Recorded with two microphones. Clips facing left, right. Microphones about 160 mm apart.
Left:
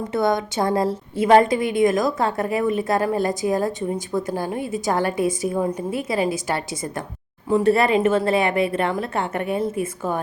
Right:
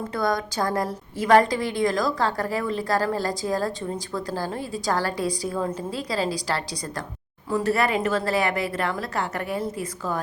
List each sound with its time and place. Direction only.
0.1 s a woman's voice: 25° left (ahead or behind)